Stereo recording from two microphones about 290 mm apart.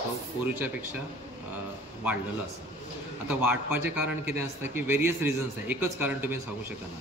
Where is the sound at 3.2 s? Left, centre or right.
Centre.